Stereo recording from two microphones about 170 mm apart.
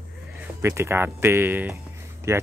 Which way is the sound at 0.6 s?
15° right (ahead or behind).